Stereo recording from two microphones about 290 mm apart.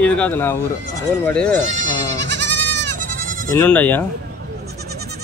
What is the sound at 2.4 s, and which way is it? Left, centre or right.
Goat, right.